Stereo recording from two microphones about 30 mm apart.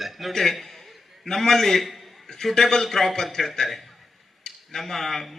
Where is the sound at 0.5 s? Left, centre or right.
Centre.